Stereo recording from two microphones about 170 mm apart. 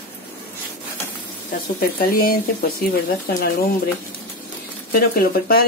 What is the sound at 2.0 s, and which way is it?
Speech, 60° left (ahead or behind).